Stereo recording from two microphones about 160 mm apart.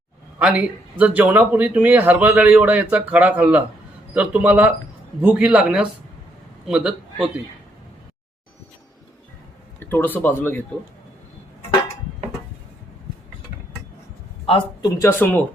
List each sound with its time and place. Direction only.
0.3 s a man's voice: 10° right (ahead or behind)
9.8 s a sound: 10° left (ahead or behind)
10.2 s a man's voice: 10° left (ahead or behind)
14.4 s speech: 35° left (ahead or behind)
14.8 s speech: 20° left (ahead or behind)